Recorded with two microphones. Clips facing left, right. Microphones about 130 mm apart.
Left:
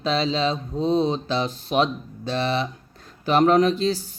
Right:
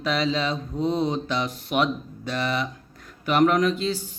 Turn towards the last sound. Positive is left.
turn(degrees=35)  # may be behind; listen again after turning